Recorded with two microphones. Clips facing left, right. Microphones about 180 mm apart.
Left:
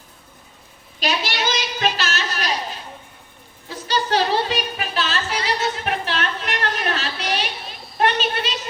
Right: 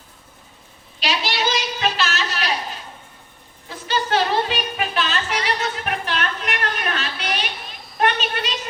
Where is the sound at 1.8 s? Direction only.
40° left (ahead or behind).